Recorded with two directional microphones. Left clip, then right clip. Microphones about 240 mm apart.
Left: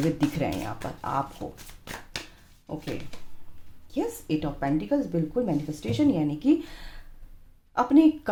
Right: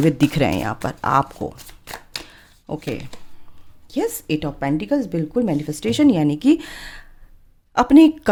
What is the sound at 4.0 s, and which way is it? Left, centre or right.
Speech, right.